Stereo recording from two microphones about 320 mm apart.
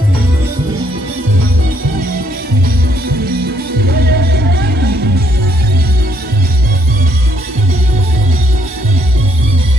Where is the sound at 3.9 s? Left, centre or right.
Right.